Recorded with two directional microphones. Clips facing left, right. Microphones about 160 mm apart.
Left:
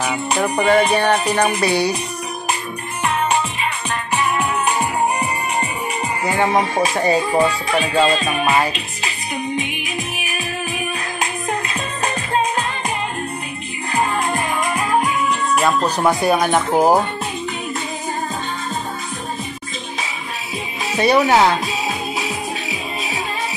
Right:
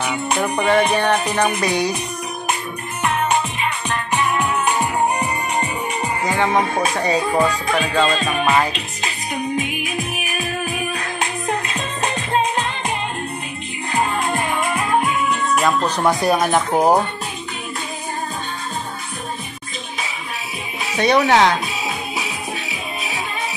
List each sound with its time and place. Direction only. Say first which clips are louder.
0.0 s music: left 1 dB; 5° left (ahead or behind)
4.1 s music: even; 10° left (ahead or behind)
13.9 s music: left 1 dB; centre (ahead or behind)
20.3 s music: left 2 dB; centre (ahead or behind)